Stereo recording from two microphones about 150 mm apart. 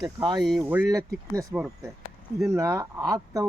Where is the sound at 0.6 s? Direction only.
10° right (ahead or behind).